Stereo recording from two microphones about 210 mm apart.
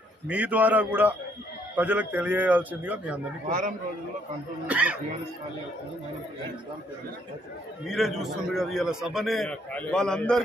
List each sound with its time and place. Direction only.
0.3 s a man's voice: 5° right (ahead or behind)
3.4 s a man's voice: 40° right (ahead or behind)
4.6 s a man's voice: 5° right (ahead or behind)
7.9 s a man's voice: centre (ahead or behind)